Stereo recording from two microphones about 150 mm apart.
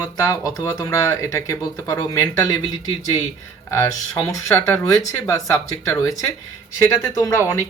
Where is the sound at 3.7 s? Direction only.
20° left (ahead or behind).